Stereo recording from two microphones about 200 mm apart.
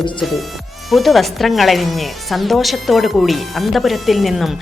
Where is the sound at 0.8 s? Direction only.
Centre (ahead or behind).